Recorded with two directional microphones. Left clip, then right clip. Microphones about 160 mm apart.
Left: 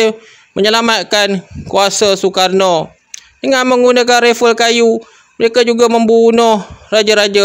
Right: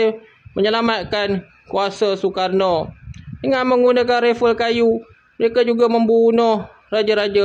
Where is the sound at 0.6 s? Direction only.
50° left (ahead or behind).